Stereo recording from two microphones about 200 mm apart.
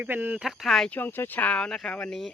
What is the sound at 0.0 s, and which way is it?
Speech, 10° right (ahead or behind).